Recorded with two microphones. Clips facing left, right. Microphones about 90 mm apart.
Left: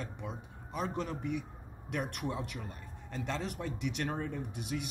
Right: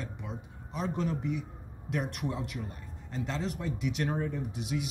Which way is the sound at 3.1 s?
55° left (ahead or behind).